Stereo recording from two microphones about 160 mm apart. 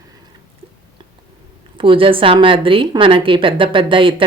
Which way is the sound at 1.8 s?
35° right (ahead or behind).